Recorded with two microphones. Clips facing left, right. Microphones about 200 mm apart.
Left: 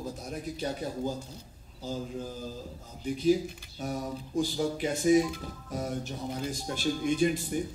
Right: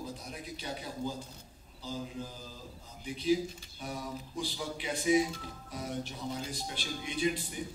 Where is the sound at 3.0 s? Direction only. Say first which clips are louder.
Left 4 dB; 45° left (ahead or behind).